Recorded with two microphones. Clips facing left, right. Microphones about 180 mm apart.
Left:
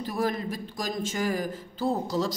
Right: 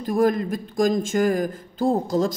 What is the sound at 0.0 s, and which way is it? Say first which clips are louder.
Speech: right 8 dB; 50° right (ahead or behind).